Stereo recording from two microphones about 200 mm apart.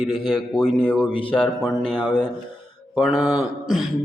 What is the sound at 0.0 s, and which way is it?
A man's voice, centre (ahead or behind).